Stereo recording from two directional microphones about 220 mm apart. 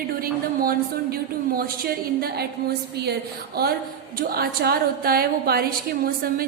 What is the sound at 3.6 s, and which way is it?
A woman's voice, 45° right (ahead or behind).